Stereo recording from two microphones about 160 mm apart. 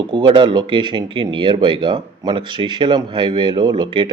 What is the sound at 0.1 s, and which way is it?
Speech, 30° right (ahead or behind).